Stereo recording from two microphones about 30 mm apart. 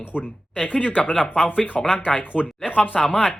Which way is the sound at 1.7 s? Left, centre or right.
Centre.